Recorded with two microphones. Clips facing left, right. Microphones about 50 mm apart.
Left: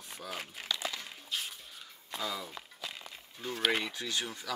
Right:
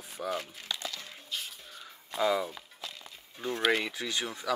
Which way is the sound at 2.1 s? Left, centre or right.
Right.